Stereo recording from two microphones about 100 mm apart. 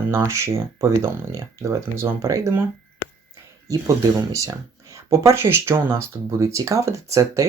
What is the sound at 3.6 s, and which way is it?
Speech, 35° right (ahead or behind).